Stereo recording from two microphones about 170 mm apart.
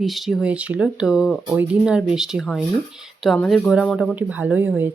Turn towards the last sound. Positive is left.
turn(degrees=-10)  # may be behind; listen again after turning